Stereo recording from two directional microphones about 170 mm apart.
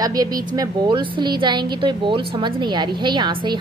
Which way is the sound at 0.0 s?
20° right (ahead or behind).